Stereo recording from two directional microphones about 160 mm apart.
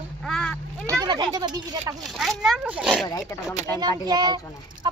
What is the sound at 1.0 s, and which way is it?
Speech, 25° right (ahead or behind).